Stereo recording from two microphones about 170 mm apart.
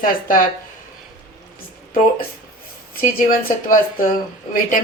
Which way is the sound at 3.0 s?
55° left (ahead or behind).